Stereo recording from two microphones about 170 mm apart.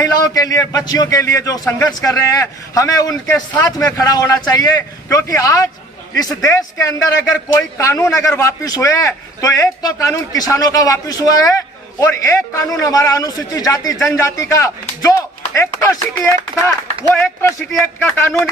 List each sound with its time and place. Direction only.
0.0 s a man's voice: 20° left (ahead or behind)
17.1 s speech: 15° left (ahead or behind)